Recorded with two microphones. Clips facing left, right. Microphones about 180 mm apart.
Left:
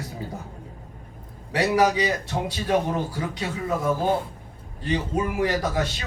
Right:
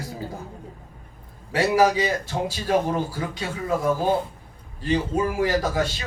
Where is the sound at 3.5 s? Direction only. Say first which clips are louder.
Right 2 dB; 30° right (ahead or behind).